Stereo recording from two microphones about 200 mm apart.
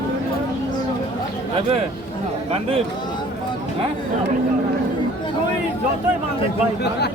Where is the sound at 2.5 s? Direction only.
30° right (ahead or behind).